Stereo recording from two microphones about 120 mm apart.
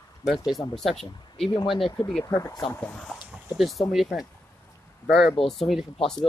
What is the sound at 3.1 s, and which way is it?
Speech, 5° right (ahead or behind).